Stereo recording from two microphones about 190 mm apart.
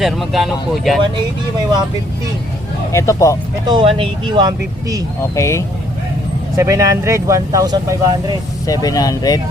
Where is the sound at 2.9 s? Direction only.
15° left (ahead or behind).